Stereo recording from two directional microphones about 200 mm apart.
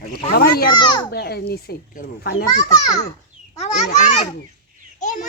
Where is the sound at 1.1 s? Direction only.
55° left (ahead or behind).